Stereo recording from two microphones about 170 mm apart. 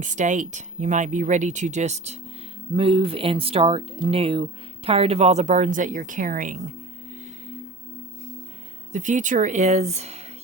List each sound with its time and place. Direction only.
0.0 s speech: 45° right (ahead or behind)
8.9 s speech: 45° right (ahead or behind)